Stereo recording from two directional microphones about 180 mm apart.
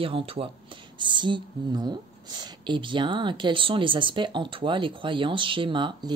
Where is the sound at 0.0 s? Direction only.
30° right (ahead or behind).